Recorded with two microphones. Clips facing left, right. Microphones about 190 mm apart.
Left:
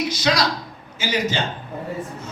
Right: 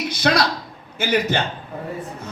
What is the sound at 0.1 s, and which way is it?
A man's voice, 55° right (ahead or behind).